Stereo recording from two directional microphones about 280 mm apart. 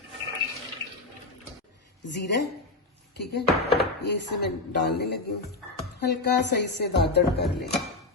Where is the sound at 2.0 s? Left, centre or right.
Left.